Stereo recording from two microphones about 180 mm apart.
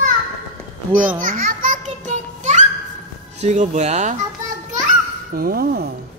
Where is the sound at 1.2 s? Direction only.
50° right (ahead or behind).